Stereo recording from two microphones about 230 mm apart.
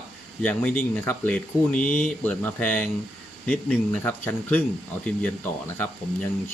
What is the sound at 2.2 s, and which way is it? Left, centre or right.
Speech, centre.